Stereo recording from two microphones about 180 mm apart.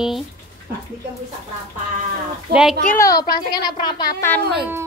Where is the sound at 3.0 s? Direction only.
20° left (ahead or behind).